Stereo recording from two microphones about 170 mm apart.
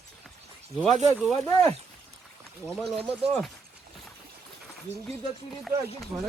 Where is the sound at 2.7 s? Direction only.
Centre (ahead or behind).